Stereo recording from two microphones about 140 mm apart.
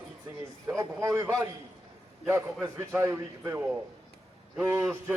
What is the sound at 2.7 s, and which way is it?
Speech, 20° right (ahead or behind).